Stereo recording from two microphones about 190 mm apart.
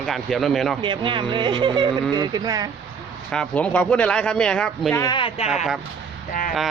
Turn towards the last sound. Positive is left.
turn(degrees=45)  # may be behind; listen again after turning